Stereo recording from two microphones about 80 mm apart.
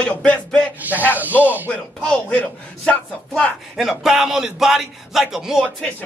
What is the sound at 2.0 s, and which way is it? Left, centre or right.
Speech, centre.